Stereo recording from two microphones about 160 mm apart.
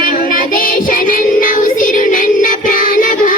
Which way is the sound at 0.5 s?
55° left (ahead or behind).